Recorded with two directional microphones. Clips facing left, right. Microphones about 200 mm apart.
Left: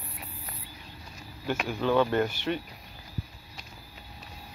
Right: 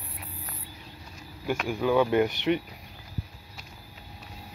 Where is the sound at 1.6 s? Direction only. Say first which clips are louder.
Right 1 dB; 10° right (ahead or behind).